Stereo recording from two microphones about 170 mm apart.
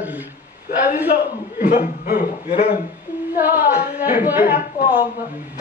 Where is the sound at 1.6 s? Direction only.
55° left (ahead or behind).